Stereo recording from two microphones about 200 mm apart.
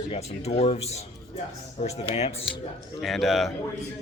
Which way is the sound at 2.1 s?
30° left (ahead or behind).